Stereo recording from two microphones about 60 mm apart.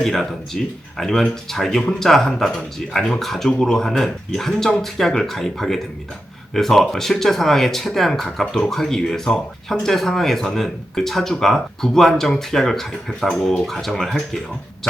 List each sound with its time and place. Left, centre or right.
0.0 s speech: centre
13.3 s speech: centre
13.7 s speech: centre